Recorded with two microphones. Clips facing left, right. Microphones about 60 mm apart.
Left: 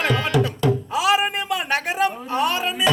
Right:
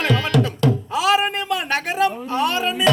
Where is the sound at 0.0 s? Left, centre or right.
Centre.